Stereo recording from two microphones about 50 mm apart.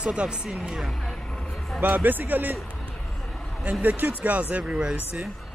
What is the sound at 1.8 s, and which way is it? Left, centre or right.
Speech, right.